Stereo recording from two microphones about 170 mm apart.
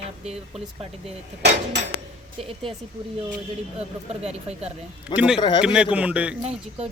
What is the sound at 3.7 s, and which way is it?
Speech, 35° right (ahead or behind).